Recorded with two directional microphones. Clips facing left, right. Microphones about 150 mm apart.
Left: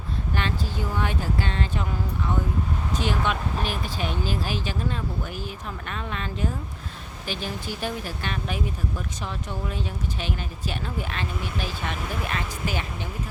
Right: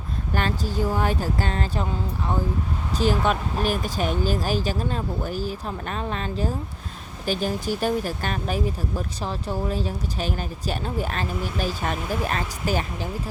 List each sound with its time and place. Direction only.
0.3 s speech: 40° right (ahead or behind)